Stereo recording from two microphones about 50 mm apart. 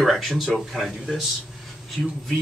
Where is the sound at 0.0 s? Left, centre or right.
Centre.